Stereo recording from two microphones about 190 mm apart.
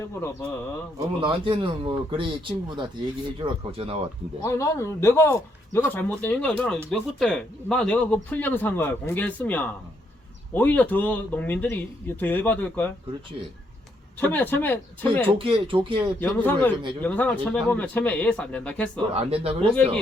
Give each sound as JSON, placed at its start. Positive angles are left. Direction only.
{"t": 0.0, "sound": "speech", "side_deg": 15}
{"t": 0.9, "sound": "a man's voice", "side_deg": -25}
{"t": 4.4, "sound": "speech", "side_deg": 15}
{"t": 14.2, "sound": "speech", "side_deg": 10}
{"t": 15.4, "sound": "a man's voice", "side_deg": -25}
{"t": 16.2, "sound": "speech", "side_deg": 10}
{"t": 19.1, "sound": "a man's voice", "side_deg": -30}